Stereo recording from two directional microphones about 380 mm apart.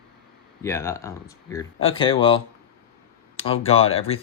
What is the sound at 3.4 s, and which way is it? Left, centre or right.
Speech, centre.